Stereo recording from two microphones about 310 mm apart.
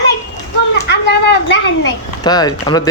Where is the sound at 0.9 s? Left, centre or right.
Left.